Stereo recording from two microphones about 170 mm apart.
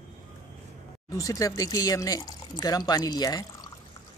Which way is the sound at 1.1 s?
20° left (ahead or behind).